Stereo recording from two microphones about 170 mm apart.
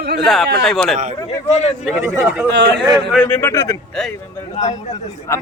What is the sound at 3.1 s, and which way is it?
Speech, 10° left (ahead or behind).